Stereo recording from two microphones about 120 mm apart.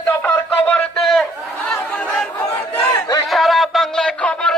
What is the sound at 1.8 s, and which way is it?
Chatter, 15° left (ahead or behind).